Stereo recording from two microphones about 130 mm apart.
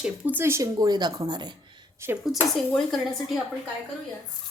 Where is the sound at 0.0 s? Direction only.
15° right (ahead or behind); by 1.5 s 35° right (ahead or behind).